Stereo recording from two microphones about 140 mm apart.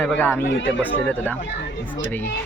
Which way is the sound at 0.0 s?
15° left (ahead or behind).